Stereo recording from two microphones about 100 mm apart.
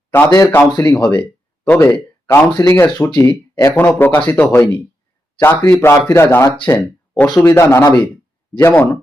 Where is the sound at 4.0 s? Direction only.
20° left (ahead or behind).